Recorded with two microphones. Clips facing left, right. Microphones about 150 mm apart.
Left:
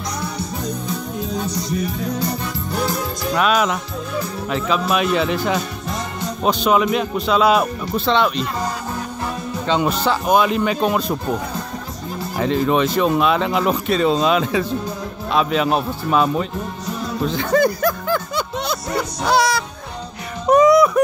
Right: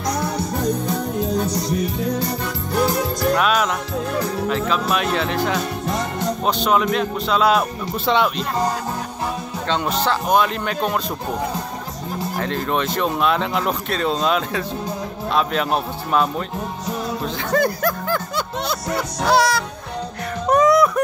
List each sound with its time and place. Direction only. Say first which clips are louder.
0.2 s music: right 4 dB; 55° right (ahead or behind)
3.3 s music: left 5 dB; centre (ahead or behind)
4.5 s speech: left 4 dB; 5° left (ahead or behind)
5.9 s music: right 3 dB; 60° right (ahead or behind)
6.4 s speech: left 3 dB; 5° left (ahead or behind)
9.7 s speech: left 2 dB; 5° left (ahead or behind)
12.4 s speech: left 6 dB; 5° left (ahead or behind)
17.2 s music: left 5 dB; centre (ahead or behind)
18.9 s speech: even; centre (ahead or behind)
20.4 s a sound: left 3 dB; centre (ahead or behind)